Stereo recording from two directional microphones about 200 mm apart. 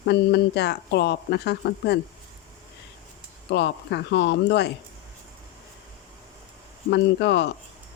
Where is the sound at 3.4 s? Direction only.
60° left (ahead or behind).